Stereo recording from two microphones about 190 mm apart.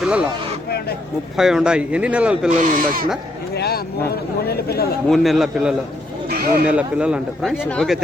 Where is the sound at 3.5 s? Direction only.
55° left (ahead or behind).